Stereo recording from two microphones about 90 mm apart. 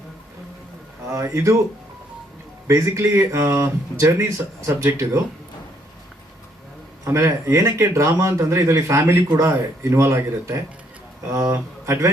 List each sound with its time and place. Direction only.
1.1 s speech: 35° right (ahead or behind)
2.6 s speech: 35° right (ahead or behind)
7.0 s a man's voice: 35° right (ahead or behind)